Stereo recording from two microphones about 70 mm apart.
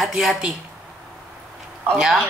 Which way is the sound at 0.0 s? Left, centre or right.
Centre.